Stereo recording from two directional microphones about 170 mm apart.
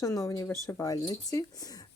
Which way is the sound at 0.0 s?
20° left (ahead or behind).